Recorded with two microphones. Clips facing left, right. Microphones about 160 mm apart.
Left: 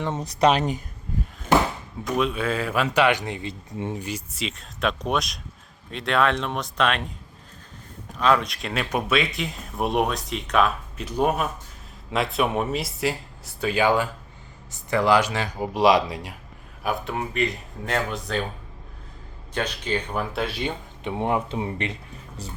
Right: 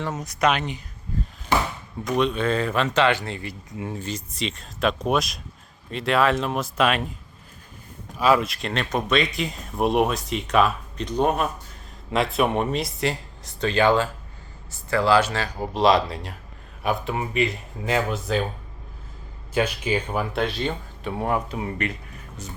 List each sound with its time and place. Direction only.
0.0 s speech: 30° left (ahead or behind)
2.1 s speech: 5° left (ahead or behind)
3.7 s speech: 30° left (ahead or behind)
3.9 s speech: 10° left (ahead or behind); by 7.1 s 5° right (ahead or behind)
8.2 s speech: 5° right (ahead or behind); by 16.3 s 15° left (ahead or behind)
16.8 s speech: centre (ahead or behind)
19.5 s speech: 10° right (ahead or behind); by 22.5 s 30° left (ahead or behind)